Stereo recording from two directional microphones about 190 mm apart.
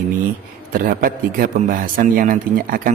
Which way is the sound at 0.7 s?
45° right (ahead or behind).